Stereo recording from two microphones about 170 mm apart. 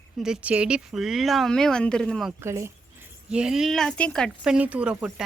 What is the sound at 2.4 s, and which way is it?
Speech, 15° right (ahead or behind).